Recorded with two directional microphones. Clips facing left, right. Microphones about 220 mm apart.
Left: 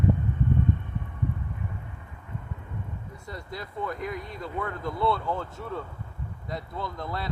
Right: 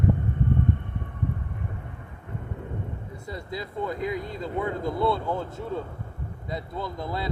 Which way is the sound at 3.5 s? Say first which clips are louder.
Right 3 dB; 10° right (ahead or behind).